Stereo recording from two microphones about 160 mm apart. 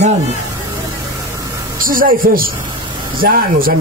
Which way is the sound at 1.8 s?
60° right (ahead or behind).